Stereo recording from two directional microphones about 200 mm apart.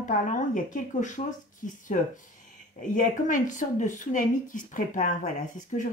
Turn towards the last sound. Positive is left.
turn(degrees=40)  # may be behind; listen again after turning